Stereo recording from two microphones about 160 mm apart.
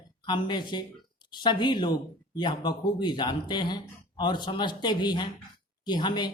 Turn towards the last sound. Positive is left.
turn(degrees=25)  # may be behind; listen again after turning